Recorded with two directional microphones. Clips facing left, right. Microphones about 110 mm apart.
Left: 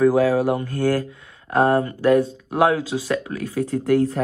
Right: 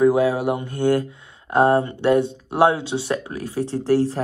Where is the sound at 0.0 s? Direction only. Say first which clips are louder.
Left 1 dB; 20° right (ahead or behind).